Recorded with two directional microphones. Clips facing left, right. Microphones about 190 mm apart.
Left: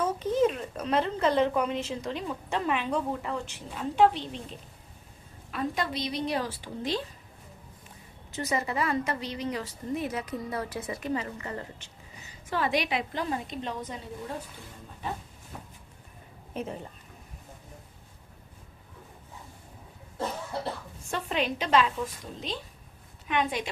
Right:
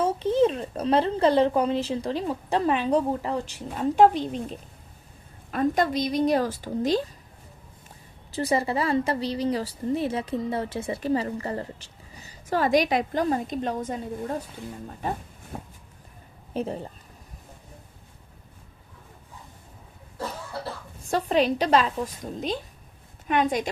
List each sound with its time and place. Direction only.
0.0 s a woman's voice: 30° right (ahead or behind)
8.3 s a woman's voice: 30° right (ahead or behind); by 14.3 s 45° right (ahead or behind)
15.5 s a woman's voice: 45° right (ahead or behind)
21.1 s a woman's voice: 35° right (ahead or behind)